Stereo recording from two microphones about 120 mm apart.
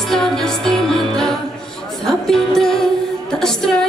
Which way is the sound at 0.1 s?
5° left (ahead or behind).